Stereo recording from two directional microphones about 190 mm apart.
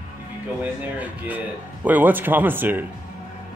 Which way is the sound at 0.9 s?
10° right (ahead or behind).